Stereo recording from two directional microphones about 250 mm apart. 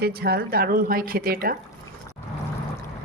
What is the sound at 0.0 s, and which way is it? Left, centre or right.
A woman's voice, right.